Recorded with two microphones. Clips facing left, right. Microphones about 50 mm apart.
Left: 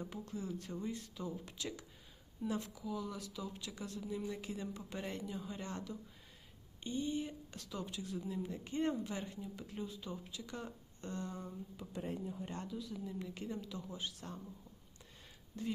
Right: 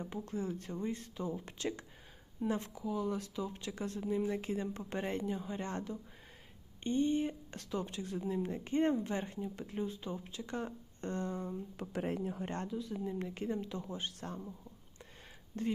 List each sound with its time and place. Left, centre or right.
0.0 s speech: right
0.3 s speech: right
11.8 s speech: right
12.8 s speech: right
15.6 s speech: right